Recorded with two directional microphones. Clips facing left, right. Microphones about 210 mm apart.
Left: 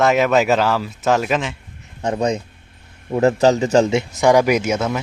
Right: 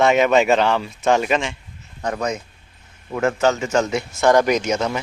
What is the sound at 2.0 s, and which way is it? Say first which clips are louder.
Speech: left 4 dB; 25° left (ahead or behind).